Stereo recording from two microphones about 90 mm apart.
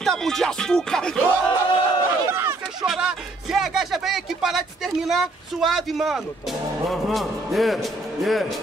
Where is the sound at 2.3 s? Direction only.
30° right (ahead or behind).